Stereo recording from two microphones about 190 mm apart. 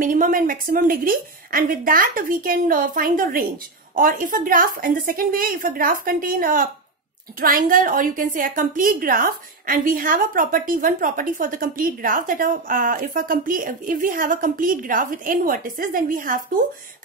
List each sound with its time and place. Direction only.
0.0 s a woman's voice: 45° right (ahead or behind)